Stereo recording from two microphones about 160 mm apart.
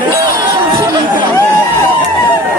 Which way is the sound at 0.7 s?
20° right (ahead or behind).